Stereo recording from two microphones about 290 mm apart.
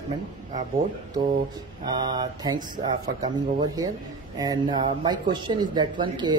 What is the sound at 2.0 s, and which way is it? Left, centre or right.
Speech, centre.